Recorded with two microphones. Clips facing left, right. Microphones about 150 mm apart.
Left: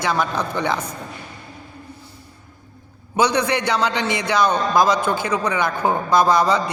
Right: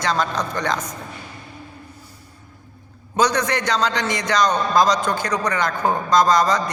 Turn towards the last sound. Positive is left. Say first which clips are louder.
# even
turn(degrees=10)  # may be behind; listen again after turning